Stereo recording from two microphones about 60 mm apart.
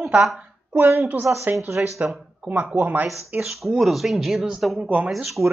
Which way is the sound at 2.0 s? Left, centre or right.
Right.